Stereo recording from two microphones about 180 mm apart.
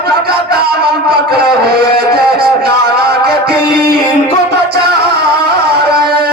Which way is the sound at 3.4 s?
60° right (ahead or behind).